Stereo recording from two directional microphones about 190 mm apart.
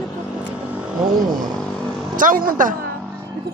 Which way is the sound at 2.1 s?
45° right (ahead or behind).